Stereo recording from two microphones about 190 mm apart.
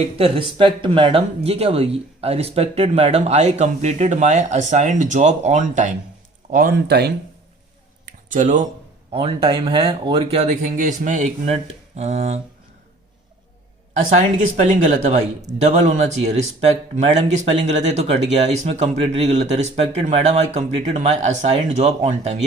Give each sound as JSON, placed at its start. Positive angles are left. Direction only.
{"t": 0.2, "sound": "speech", "side_deg": -25}
{"t": 8.3, "sound": "speech", "side_deg": -40}
{"t": 9.1, "sound": "speech", "side_deg": -25}
{"t": 14.2, "sound": "speech", "side_deg": -40}